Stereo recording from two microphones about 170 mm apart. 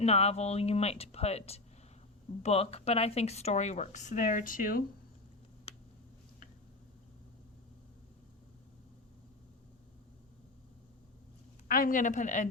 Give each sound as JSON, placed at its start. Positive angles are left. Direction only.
{"t": 0.0, "sound": "speech", "side_deg": 40}
{"t": 11.7, "sound": "speech", "side_deg": 50}